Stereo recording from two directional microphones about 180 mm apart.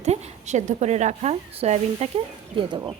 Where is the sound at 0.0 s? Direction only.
40° right (ahead or behind).